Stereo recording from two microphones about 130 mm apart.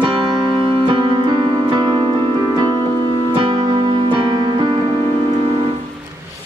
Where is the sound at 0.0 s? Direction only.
35° right (ahead or behind).